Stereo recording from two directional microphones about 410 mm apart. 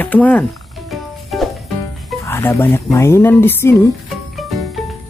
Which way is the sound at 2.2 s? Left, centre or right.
Centre.